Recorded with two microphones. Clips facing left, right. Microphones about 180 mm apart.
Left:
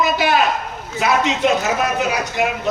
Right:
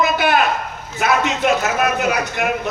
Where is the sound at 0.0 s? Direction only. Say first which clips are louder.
Even; 55° right (ahead or behind).